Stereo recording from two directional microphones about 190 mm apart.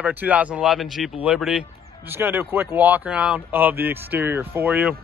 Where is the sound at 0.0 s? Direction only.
10° right (ahead or behind).